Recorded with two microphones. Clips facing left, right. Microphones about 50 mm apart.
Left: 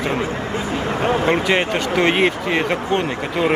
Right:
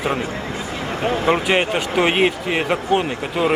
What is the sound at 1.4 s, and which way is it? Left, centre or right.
Speech, centre.